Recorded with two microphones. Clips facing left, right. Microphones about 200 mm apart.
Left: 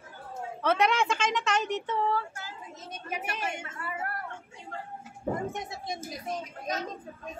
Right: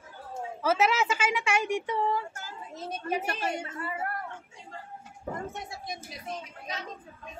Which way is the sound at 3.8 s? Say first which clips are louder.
Left 1 dB; 25° right (ahead or behind).